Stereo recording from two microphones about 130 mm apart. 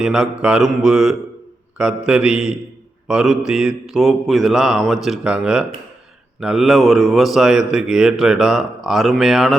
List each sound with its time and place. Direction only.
0.0 s speech: 5° right (ahead or behind)